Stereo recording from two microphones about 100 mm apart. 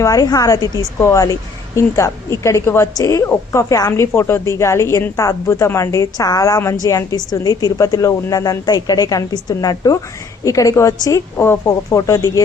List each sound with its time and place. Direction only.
0.0 s a woman's voice: 35° left (ahead or behind)